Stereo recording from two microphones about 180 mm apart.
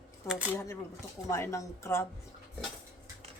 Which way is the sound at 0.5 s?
15° left (ahead or behind).